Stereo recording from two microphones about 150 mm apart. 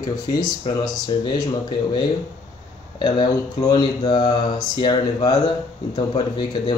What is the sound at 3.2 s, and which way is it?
Speech, 25° left (ahead or behind).